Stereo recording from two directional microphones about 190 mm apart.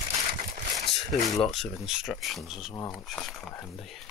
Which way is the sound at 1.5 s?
Centre (ahead or behind).